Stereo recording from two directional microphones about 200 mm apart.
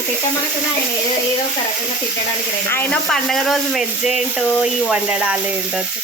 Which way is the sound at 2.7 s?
10° left (ahead or behind).